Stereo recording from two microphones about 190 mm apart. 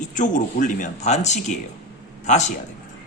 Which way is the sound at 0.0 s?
40° left (ahead or behind).